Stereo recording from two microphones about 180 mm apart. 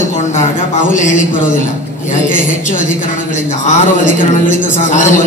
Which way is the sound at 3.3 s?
45° left (ahead or behind).